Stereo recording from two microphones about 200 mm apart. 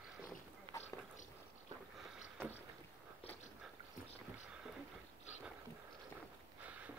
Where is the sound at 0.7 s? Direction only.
25° right (ahead or behind).